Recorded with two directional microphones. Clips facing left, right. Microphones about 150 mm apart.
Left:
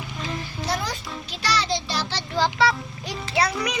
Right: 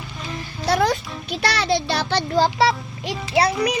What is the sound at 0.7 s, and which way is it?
A child's voice, 65° right (ahead or behind).